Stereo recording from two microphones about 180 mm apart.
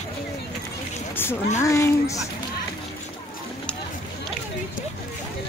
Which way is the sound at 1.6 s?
15° left (ahead or behind).